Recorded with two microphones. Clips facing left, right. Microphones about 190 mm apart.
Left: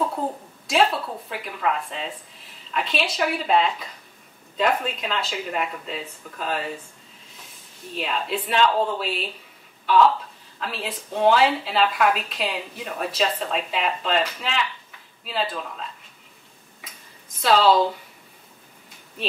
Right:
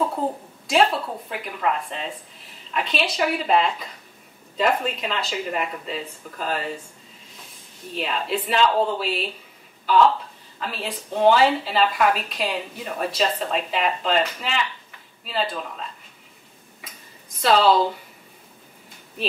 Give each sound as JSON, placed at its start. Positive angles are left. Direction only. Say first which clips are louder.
{"t": 0.7, "sound": "a woman's voice", "louder": "right 1 dB", "side_deg": 0}
{"t": 7.9, "sound": "a woman's voice", "louder": "right 1 dB", "side_deg": 0}
{"t": 17.4, "sound": "a woman's voice", "louder": "even", "side_deg": 0}